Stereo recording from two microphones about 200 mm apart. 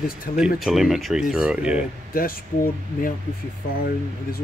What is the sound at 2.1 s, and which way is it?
Speech, 45° left (ahead or behind).